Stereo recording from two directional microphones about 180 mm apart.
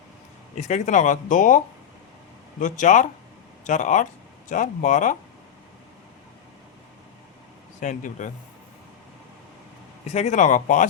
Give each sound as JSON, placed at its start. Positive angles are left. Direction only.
{"t": 0.5, "sound": "speech", "side_deg": 40}
{"t": 7.8, "sound": "speech", "side_deg": 45}
{"t": 10.1, "sound": "speech", "side_deg": 40}